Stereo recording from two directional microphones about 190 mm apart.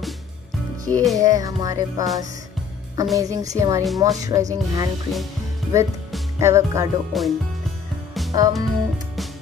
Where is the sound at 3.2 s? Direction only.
15° right (ahead or behind).